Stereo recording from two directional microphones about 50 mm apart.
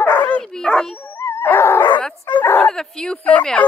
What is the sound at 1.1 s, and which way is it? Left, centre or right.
Dog, left.